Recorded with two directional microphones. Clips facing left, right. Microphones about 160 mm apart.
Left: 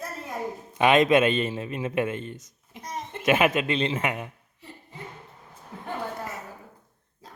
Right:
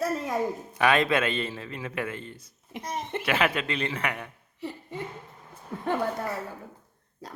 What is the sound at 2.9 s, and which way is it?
Speech, 70° right (ahead or behind).